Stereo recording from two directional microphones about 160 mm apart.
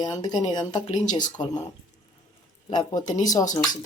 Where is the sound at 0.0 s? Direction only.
25° left (ahead or behind).